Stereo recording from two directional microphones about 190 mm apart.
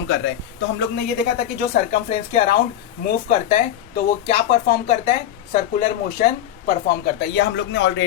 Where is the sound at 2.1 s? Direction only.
35° left (ahead or behind).